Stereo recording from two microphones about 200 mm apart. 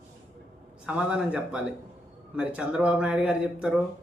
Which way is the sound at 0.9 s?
5° right (ahead or behind).